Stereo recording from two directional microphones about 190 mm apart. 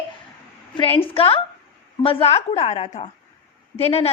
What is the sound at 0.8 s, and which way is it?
A woman's voice, 30° left (ahead or behind).